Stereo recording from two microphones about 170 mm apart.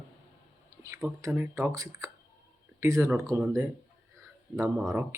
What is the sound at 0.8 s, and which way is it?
Speech, 15° right (ahead or behind).